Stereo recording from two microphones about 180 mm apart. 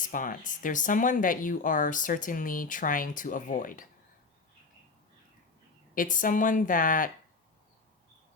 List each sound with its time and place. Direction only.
0.0 s speech: 50° left (ahead or behind)
5.9 s speech: 50° left (ahead or behind)